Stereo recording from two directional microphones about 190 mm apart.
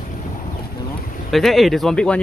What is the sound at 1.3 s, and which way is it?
Speech, centre (ahead or behind).